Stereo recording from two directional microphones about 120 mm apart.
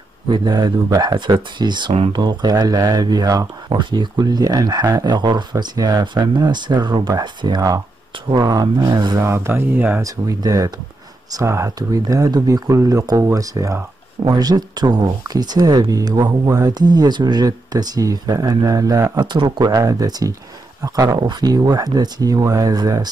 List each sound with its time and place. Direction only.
0.3 s speech: 35° right (ahead or behind); by 10.0 s 15° right (ahead or behind)
10.0 s speech: 30° right (ahead or behind)
19.3 s speech: 40° right (ahead or behind)